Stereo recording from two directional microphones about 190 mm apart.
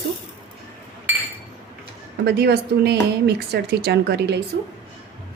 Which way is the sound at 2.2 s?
60° right (ahead or behind).